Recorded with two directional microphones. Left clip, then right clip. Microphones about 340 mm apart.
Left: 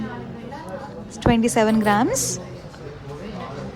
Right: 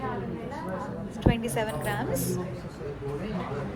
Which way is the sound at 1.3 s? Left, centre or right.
Centre.